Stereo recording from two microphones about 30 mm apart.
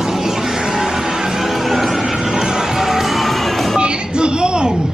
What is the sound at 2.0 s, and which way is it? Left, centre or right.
Music, right.